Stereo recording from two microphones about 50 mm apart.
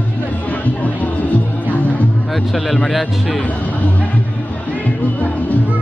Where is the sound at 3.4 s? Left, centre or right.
Left.